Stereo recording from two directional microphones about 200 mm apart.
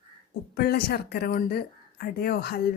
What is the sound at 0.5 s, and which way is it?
Speech, 50° left (ahead or behind).